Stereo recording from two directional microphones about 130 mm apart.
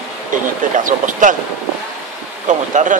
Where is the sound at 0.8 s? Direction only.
85° right.